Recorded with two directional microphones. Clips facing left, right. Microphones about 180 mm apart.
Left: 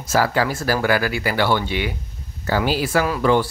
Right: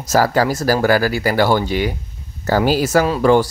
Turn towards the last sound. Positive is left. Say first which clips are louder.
# right 4 dB
turn(degrees=-40)  # may be behind; listen again after turning